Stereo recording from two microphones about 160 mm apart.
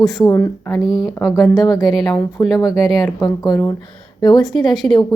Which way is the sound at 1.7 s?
Centre (ahead or behind).